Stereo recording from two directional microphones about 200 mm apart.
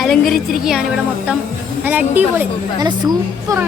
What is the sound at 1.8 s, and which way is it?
A woman's voice, 10° right (ahead or behind).